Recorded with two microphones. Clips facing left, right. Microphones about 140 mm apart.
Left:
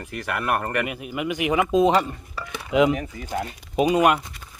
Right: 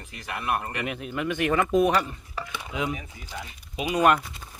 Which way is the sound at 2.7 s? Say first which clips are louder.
Left 12 dB; 75° left (ahead or behind).